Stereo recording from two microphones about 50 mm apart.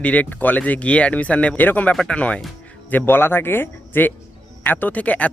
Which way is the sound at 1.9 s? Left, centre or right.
Centre.